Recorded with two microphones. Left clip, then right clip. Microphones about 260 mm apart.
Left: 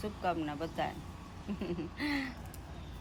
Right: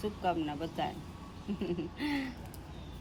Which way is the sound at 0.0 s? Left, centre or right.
Centre.